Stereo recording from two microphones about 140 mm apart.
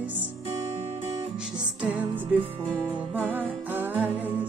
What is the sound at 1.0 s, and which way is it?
Music, 40° right (ahead or behind).